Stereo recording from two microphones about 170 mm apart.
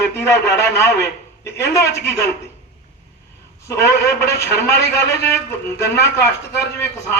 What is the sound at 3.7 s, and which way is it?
Speech, 15° left (ahead or behind).